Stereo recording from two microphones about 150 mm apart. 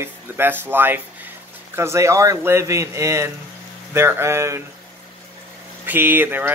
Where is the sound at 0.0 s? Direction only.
15° right (ahead or behind).